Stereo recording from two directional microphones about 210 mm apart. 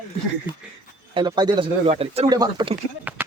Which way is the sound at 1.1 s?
20° right (ahead or behind).